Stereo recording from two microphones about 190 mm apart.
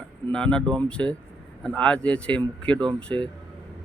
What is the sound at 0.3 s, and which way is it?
Speech, 5° left (ahead or behind).